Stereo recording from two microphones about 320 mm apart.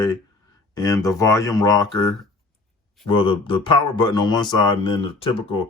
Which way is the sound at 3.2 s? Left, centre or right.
Centre.